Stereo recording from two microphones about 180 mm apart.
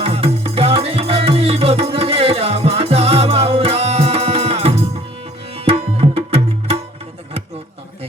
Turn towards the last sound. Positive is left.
turn(degrees=-35)  # may be behind; listen again after turning